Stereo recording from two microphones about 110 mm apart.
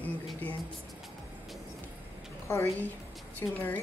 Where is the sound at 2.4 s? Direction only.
25° left (ahead or behind).